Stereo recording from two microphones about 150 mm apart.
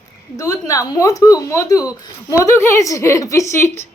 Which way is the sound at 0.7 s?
20° left (ahead or behind).